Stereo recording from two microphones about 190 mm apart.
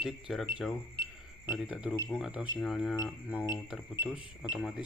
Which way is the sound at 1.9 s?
15° left (ahead or behind).